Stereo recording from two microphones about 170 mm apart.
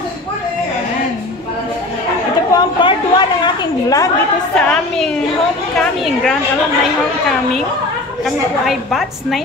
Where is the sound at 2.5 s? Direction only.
25° left (ahead or behind).